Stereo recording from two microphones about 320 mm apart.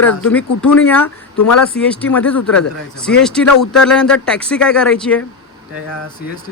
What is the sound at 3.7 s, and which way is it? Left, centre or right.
Speech, centre.